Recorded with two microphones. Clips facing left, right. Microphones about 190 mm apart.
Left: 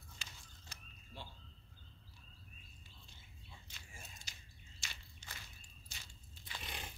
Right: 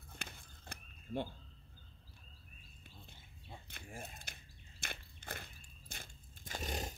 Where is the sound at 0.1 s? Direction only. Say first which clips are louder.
Right 8 dB; 55° right (ahead or behind).